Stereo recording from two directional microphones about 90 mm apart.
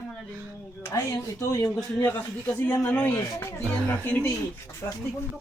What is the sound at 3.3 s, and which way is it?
Speech, 30° left (ahead or behind).